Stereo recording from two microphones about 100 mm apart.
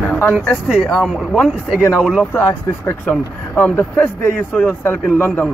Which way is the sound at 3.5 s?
20° left (ahead or behind).